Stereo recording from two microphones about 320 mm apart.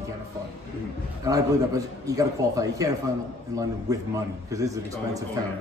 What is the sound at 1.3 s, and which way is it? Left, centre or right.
A man's voice, centre.